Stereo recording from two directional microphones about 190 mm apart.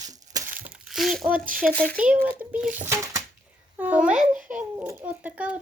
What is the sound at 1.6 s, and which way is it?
Speech, 5° left (ahead or behind).